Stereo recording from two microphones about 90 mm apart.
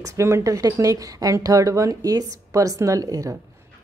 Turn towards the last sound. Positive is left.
turn(degrees=-40)  # may be behind; listen again after turning